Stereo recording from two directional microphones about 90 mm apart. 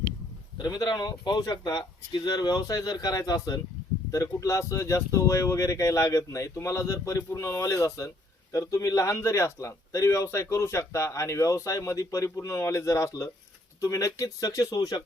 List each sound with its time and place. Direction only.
0.6 s a man's voice: 45° left (ahead or behind)